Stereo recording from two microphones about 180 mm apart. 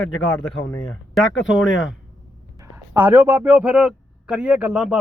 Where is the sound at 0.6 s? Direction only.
20° left (ahead or behind).